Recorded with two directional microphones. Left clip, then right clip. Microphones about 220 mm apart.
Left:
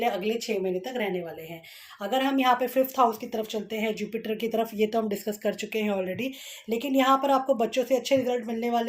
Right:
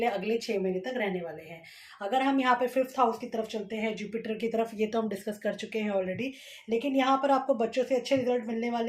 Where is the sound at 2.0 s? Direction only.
40° left (ahead or behind).